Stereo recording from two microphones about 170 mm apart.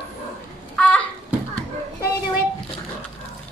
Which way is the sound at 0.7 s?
5° left (ahead or behind).